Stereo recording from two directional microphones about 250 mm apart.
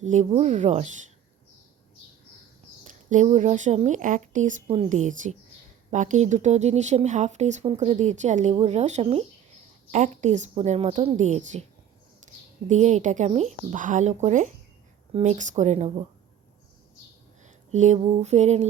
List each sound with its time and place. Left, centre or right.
0.0 s speech: right
2.8 s speech: right
12.6 s speech: right
17.4 s a sound: right